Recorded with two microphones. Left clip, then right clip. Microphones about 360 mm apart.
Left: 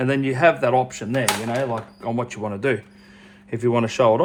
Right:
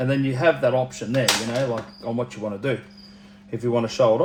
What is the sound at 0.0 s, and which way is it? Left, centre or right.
Speech, left.